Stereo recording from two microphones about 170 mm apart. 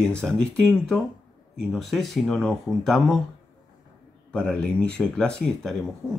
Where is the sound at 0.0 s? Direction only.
5° left (ahead or behind).